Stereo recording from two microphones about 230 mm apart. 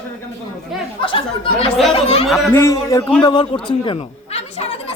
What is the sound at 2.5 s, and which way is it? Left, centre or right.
A man's voice, centre.